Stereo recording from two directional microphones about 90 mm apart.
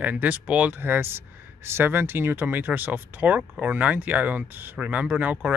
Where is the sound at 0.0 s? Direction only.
15° right (ahead or behind).